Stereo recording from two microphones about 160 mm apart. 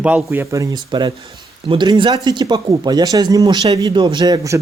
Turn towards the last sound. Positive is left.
turn(degrees=-25)  # may be behind; listen again after turning